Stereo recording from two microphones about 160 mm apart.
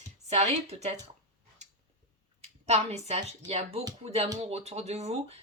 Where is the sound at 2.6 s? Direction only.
40° right (ahead or behind).